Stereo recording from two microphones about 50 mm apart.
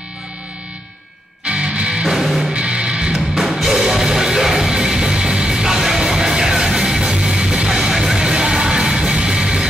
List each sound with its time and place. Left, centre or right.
1.4 s music: right
2.0 s music: centre
2.5 s music: centre